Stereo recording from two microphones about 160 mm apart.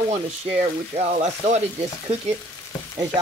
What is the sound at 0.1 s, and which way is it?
Speech, 40° right (ahead or behind).